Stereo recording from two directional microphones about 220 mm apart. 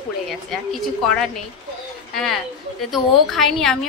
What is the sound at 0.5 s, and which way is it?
Speech, centre (ahead or behind).